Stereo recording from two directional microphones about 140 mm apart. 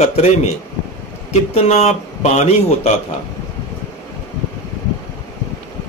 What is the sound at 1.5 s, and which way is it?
A man's voice, 50° left (ahead or behind).